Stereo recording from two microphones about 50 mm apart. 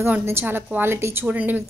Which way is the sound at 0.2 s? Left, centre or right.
Right.